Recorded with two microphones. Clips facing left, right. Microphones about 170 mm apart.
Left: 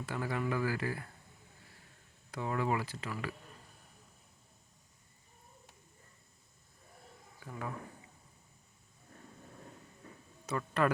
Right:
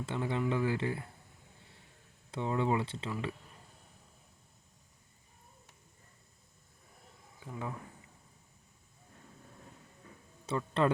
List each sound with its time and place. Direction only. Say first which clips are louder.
0.0 s speech: right 2 dB; 25° right (ahead or behind)
2.3 s speech: right 2 dB; 25° right (ahead or behind)
7.3 s speech: right 1 dB; 20° right (ahead or behind)
10.5 s speech: right 2 dB; 30° right (ahead or behind)